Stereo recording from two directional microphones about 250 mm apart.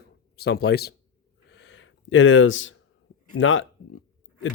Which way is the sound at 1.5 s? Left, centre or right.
Left.